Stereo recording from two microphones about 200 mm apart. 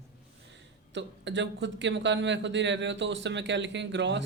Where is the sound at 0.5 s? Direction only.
65° right (ahead or behind).